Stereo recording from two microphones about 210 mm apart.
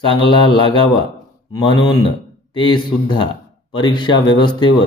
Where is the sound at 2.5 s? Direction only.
20° left (ahead or behind).